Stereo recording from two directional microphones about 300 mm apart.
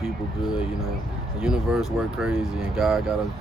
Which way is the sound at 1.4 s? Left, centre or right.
Centre.